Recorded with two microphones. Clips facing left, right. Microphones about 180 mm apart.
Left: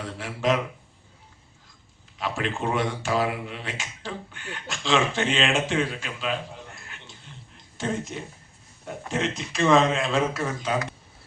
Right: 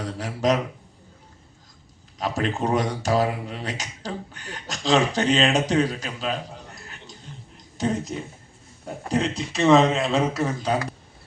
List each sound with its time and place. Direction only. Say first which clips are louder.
0.0 s speech: right 3 dB; 40° right (ahead or behind)
2.1 s speech: right 3 dB; 40° right (ahead or behind)